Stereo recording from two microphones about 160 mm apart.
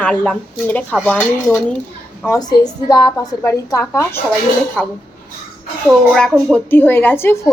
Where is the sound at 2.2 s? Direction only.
20° left (ahead or behind).